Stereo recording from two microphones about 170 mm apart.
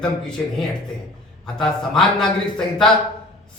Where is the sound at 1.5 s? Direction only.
5° left (ahead or behind).